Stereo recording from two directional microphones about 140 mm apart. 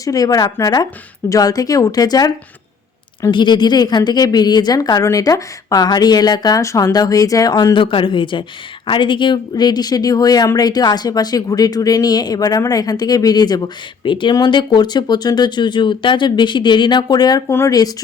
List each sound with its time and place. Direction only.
0.0 s speech: 25° left (ahead or behind)
3.3 s speech: 30° left (ahead or behind)